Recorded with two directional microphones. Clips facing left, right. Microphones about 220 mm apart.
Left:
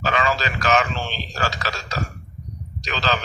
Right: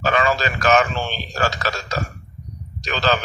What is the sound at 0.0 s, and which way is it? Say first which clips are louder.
A man's voice: right 3 dB; 50° right (ahead or behind).